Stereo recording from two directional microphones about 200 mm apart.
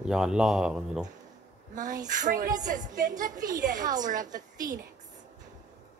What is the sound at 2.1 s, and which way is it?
A woman's voice, 40° right (ahead or behind).